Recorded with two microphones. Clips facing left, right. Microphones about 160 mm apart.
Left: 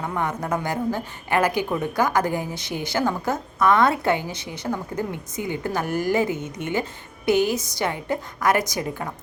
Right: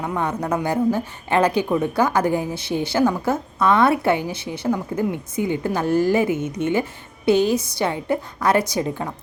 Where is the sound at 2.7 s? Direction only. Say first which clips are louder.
Right 5 dB; 25° right (ahead or behind).